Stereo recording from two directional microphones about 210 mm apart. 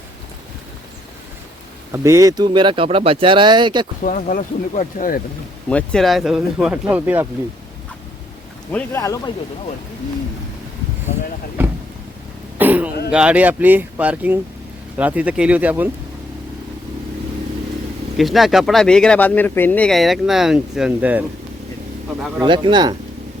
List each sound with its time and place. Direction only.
1.9 s speech: 15° right (ahead or behind)
4.0 s speech: 40° left (ahead or behind)
5.6 s speech: 5° left (ahead or behind)
8.7 s speech: 10° left (ahead or behind)
12.5 s throat clearing: 10° right (ahead or behind)
13.1 s speech: 5° right (ahead or behind)
18.2 s speech: centre (ahead or behind)
22.4 s speech: 20° right (ahead or behind)